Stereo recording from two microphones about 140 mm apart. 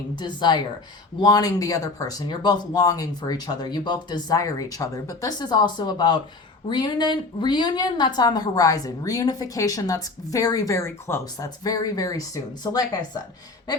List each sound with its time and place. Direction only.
0.2 s a woman's voice: 30° left (ahead or behind)